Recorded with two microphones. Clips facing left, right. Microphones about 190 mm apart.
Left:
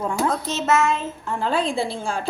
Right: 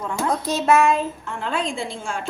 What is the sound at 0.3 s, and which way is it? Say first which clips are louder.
Speech: right 6 dB; 15° right (ahead or behind).